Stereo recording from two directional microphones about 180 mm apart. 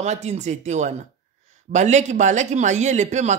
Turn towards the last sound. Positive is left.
turn(degrees=-40)  # may be behind; listen again after turning